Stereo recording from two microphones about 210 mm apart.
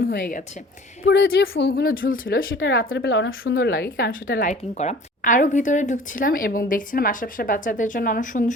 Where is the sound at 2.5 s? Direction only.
65° left (ahead or behind); by 4.1 s 45° left (ahead or behind).